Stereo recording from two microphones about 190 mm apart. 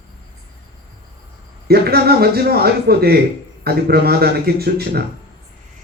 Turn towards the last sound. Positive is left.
turn(degrees=-55)  # may be behind; listen again after turning